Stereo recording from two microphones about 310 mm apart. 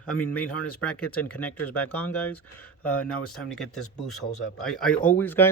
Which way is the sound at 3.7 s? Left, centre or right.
Left.